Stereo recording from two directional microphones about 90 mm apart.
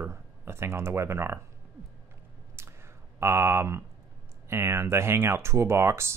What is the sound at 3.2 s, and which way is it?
Speech, 25° right (ahead or behind).